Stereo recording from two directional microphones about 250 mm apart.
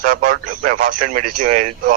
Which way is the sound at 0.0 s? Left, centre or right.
Right.